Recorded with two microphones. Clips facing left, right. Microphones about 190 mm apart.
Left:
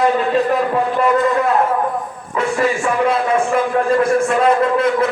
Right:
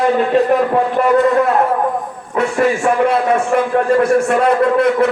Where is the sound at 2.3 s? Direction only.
50° right (ahead or behind).